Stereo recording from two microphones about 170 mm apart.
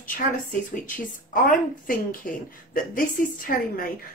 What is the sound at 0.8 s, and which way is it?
A woman's voice, 55° left (ahead or behind).